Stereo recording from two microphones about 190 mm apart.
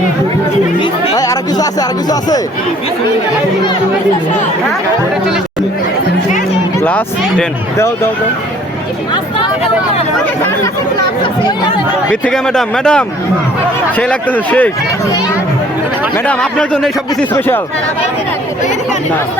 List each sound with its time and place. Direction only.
0.8 s speech: 20° left (ahead or behind)
6.8 s speech: 10° left (ahead or behind)
12.2 s speech: 5° left (ahead or behind)
16.1 s speech: 5° left (ahead or behind)